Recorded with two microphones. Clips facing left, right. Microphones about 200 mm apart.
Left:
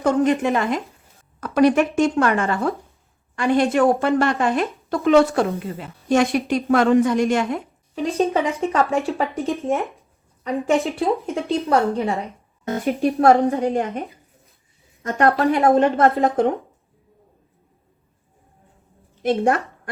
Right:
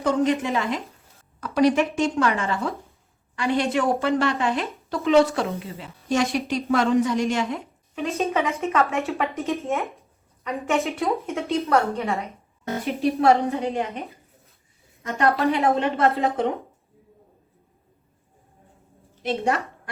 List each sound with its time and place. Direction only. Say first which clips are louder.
0.0 s a woman's voice: left 4 dB; 50° left (ahead or behind)
7.9 s speech: left 4 dB; 30° left (ahead or behind)
12.6 s a woman's voice: left 3 dB; 50° left (ahead or behind)
19.2 s a woman's voice: left 5 dB; 50° left (ahead or behind)